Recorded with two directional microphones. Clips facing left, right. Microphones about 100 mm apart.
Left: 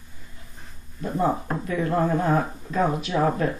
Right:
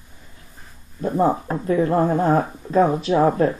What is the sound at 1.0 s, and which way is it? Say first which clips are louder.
Speech: right 5 dB; 35° right (ahead or behind).